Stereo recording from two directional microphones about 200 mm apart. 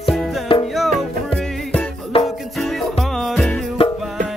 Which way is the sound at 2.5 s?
Centre (ahead or behind).